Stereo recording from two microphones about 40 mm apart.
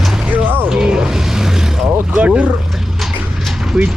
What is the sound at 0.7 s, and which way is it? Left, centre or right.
Vehicle, centre.